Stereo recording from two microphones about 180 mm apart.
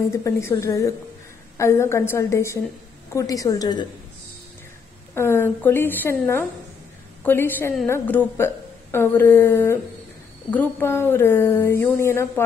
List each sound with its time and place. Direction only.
0.1 s a woman's voice: 15° left (ahead or behind)
5.1 s speech: 15° left (ahead or behind)